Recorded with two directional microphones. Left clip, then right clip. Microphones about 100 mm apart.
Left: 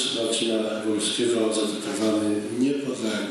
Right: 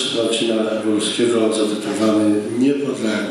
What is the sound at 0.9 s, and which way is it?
A man's voice, 15° right (ahead or behind).